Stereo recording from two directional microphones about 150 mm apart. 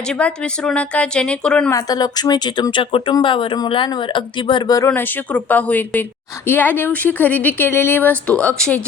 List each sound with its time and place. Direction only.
0.1 s speech: 5° left (ahead or behind)
1.7 s speech: 25° left (ahead or behind)
4.9 s speech: 10° left (ahead or behind)